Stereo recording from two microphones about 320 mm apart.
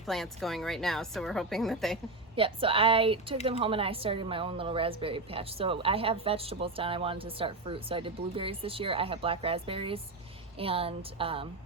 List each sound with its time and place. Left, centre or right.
0.0 s a woman's voice: centre
2.3 s a woman's voice: centre